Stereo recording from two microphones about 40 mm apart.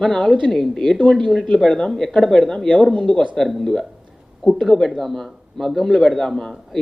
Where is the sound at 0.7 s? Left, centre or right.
Centre.